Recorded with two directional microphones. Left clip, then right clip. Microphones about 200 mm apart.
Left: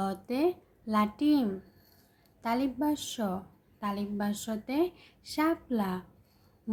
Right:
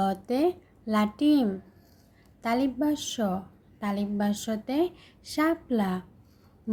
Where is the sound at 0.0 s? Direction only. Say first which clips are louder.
Right 4 dB; 20° right (ahead or behind).